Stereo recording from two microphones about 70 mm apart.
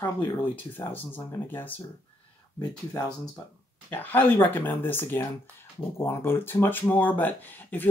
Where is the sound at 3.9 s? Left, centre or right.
Left.